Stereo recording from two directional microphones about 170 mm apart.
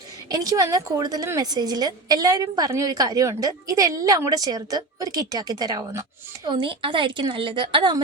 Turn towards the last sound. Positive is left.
turn(degrees=-25)  # may be behind; listen again after turning